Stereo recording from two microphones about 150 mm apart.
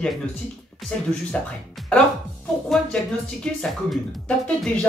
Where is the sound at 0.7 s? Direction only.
Centre (ahead or behind).